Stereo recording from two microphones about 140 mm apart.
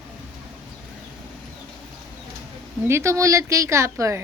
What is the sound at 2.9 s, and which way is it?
A woman's voice, 20° right (ahead or behind).